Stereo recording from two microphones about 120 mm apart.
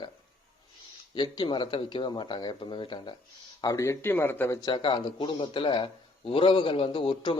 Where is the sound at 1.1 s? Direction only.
40° left (ahead or behind).